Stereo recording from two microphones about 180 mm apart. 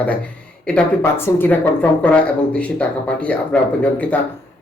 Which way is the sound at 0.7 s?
10° left (ahead or behind).